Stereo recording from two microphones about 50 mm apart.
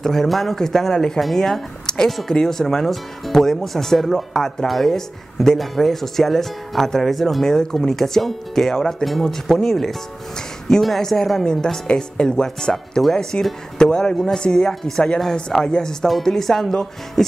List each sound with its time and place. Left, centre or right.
0.0 s speech: centre
14.7 s speech: centre
15.3 s speech: centre